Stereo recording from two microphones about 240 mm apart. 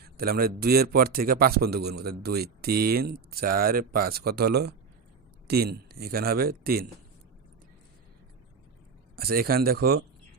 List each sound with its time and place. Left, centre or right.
0.0 s a man's voice: right
9.1 s a man's voice: right